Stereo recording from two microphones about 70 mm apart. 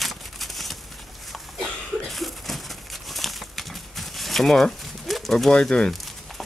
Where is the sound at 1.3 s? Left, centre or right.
Centre.